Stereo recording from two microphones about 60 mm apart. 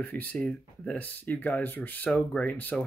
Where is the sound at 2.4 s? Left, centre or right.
Left.